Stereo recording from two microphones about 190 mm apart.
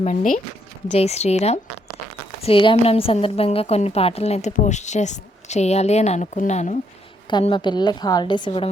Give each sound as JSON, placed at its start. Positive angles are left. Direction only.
{"t": 0.0, "sound": "a woman's voice", "side_deg": 35}
{"t": 7.3, "sound": "a woman's voice", "side_deg": 25}